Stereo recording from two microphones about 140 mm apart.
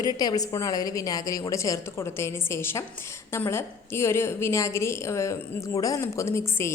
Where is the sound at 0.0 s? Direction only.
25° left (ahead or behind).